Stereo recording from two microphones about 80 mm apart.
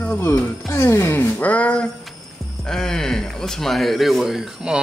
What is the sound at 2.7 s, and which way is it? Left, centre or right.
Speech, centre.